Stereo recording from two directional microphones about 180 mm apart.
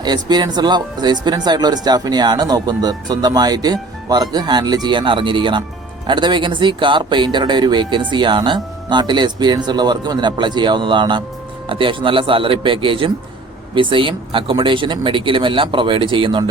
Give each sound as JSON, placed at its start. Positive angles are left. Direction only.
{"t": 0.0, "sound": "speech", "side_deg": -25}